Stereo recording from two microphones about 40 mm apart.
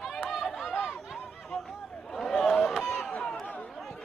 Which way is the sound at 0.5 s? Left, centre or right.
Centre.